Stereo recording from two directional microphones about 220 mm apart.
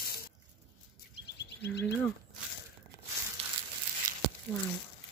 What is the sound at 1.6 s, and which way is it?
Speech, 50° left (ahead or behind).